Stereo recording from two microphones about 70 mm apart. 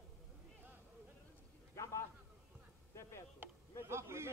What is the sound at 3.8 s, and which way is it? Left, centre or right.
Speech, right.